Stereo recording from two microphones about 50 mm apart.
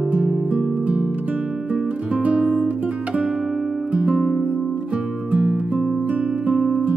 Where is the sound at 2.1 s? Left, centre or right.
Right.